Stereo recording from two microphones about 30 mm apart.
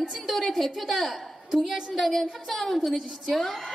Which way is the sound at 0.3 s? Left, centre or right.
Centre.